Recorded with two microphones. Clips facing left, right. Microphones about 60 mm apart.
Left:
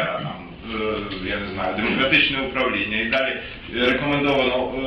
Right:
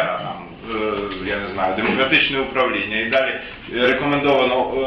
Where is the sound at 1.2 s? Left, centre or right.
Centre.